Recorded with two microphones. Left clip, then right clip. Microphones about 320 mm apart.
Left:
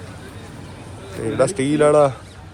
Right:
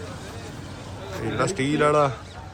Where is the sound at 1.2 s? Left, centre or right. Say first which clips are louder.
Left 6 dB; centre.